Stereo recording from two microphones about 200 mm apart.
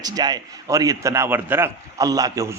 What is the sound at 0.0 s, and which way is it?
A man's voice, 20° right (ahead or behind).